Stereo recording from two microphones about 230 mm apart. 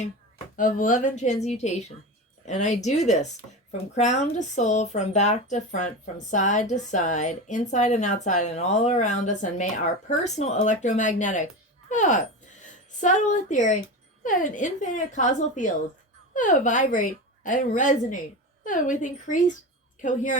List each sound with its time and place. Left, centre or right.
0.5 s speech: left